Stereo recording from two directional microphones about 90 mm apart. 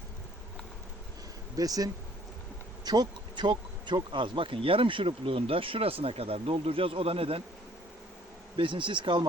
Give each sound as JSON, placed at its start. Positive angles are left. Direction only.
{"t": 1.5, "sound": "speech", "side_deg": -45}
{"t": 2.8, "sound": "bee", "side_deg": -50}
{"t": 8.5, "sound": "speech", "side_deg": -65}